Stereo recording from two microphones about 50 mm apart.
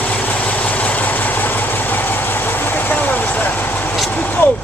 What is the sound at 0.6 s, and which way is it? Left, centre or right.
Train, left.